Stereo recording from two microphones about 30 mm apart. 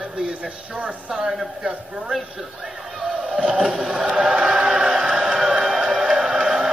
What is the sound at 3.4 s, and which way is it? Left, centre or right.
Choir, right.